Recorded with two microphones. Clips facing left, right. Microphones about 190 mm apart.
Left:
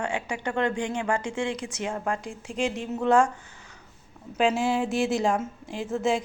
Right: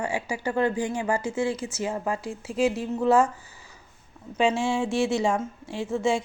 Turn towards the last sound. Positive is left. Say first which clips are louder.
# right 1 dB
turn(degrees=0)  # may be behind; listen again after turning